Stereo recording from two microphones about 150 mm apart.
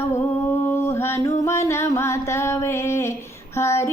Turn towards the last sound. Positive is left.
turn(degrees=20)  # may be behind; listen again after turning